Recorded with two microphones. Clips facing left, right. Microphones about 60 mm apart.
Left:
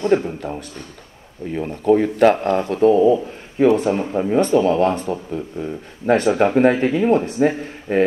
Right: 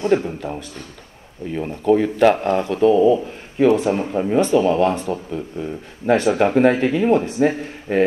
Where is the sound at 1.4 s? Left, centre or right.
Left.